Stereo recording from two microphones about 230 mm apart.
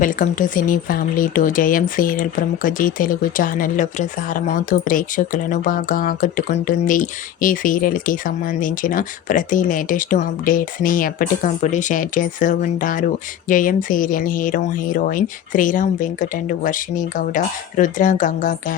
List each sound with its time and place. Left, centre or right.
0.0 s speech: left